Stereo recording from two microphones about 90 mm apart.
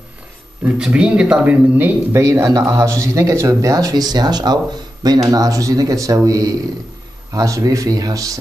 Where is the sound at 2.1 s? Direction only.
35° right (ahead or behind).